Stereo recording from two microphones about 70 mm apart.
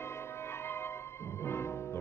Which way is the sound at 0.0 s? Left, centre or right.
Left.